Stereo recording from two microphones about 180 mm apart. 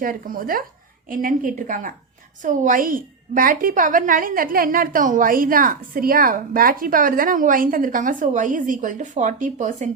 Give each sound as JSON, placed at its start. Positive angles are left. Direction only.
{"t": 0.0, "sound": "a woman's voice", "side_deg": -50}